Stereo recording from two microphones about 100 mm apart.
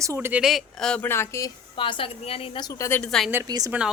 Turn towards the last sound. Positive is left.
turn(degrees=-40)  # may be behind; listen again after turning